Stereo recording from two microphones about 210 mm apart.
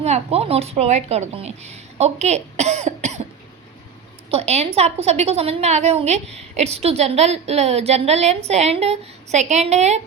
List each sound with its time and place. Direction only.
0.0 s a woman's voice: 30° right (ahead or behind)
4.3 s a woman's voice: 30° right (ahead or behind)